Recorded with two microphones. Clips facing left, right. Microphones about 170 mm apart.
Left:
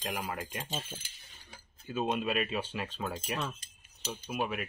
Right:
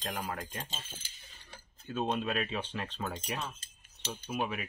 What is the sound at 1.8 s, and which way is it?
Speech, 5° left (ahead or behind).